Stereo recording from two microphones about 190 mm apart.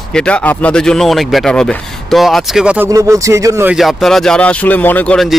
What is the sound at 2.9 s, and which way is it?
Speech, 15° right (ahead or behind).